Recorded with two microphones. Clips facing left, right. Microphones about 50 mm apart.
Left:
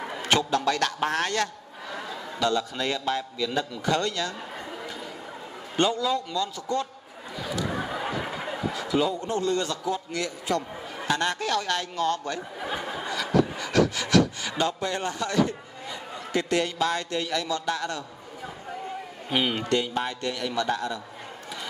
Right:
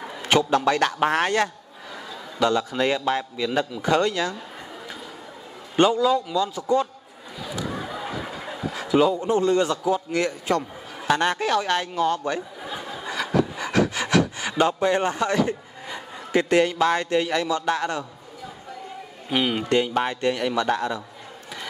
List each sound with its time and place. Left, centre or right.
0.3 s a man's voice: right
5.8 s a man's voice: right
7.8 s a sound: left
8.7 s a man's voice: right
12.7 s a sound: left
13.1 s rub: right
14.6 s a man's voice: right
19.3 s speech: centre
19.7 s a man's voice: right